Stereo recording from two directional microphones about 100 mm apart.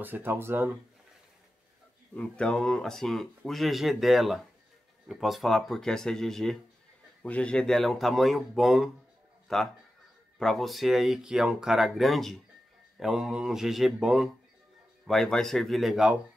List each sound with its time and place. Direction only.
0.0 s speech: 20° right (ahead or behind)
2.1 s speech: 10° left (ahead or behind)